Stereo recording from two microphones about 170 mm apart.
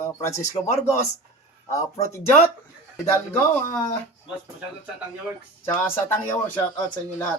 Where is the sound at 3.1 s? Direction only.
15° left (ahead or behind).